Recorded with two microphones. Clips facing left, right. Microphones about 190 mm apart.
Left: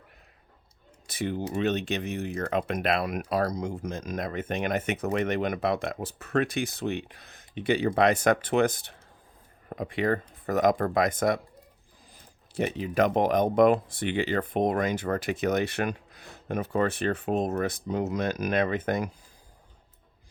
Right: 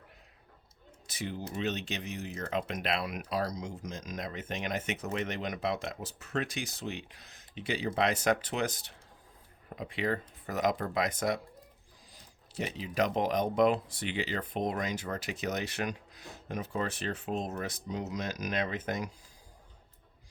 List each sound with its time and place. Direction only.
1.0 s speech: 55° left (ahead or behind)